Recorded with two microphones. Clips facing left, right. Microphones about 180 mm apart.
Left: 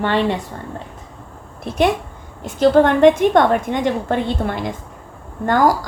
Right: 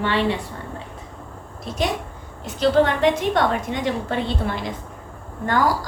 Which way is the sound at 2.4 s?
50° left (ahead or behind).